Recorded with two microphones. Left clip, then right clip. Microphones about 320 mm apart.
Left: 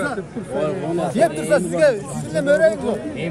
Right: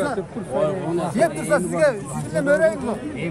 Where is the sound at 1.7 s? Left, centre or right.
Centre.